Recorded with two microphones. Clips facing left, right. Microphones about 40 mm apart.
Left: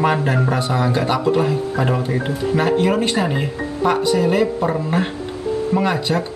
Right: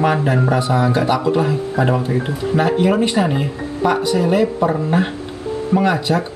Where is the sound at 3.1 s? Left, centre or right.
Centre.